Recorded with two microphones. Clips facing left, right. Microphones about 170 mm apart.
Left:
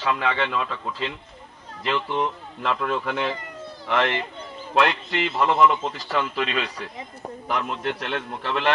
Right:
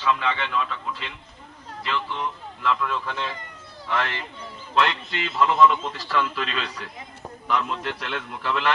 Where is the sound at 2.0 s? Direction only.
50° left (ahead or behind).